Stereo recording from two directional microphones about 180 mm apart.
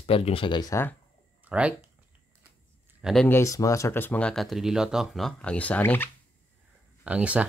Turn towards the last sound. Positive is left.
turn(degrees=-5)  # may be behind; listen again after turning